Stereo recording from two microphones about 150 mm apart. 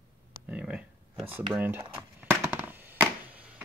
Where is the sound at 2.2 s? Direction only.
10° right (ahead or behind).